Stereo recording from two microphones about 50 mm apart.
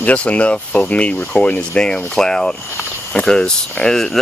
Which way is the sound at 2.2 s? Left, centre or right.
Centre.